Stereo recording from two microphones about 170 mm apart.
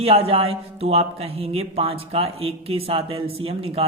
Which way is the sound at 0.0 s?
35° right (ahead or behind).